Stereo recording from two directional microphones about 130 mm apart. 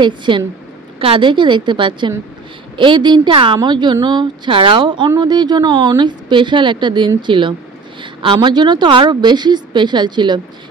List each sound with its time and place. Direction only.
0.0 s a woman's voice: 35° right (ahead or behind)